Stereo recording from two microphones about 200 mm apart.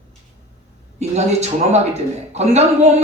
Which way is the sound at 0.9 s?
35° right (ahead or behind).